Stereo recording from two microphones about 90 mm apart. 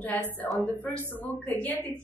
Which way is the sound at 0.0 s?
15° left (ahead or behind).